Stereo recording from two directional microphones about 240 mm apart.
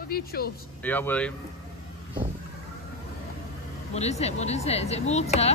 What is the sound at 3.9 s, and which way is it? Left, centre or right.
Speech, left.